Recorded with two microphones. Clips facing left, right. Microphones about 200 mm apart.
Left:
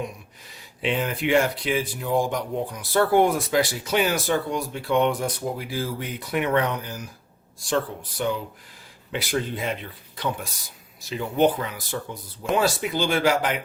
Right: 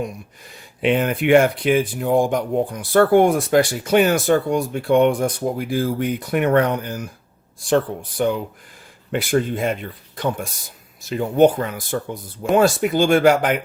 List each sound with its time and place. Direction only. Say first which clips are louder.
0.8 s speech: right 7 dB; 55° right (ahead or behind)
8.1 s speech: right 6 dB; 55° right (ahead or behind)